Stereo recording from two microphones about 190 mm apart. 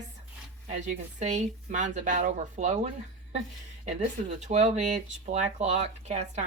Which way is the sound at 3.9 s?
40° right (ahead or behind).